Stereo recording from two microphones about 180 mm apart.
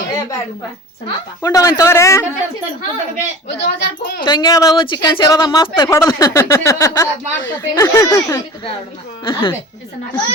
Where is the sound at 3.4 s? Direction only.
70° left (ahead or behind).